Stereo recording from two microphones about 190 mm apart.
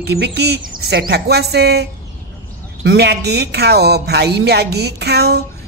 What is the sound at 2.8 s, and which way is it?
Speech, 60° right (ahead or behind).